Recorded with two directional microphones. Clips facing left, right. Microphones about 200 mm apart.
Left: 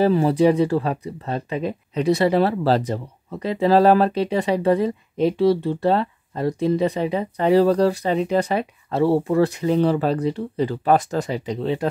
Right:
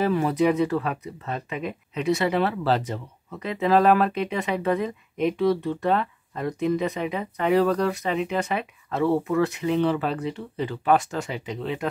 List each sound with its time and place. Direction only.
0.0 s speech: 30° left (ahead or behind)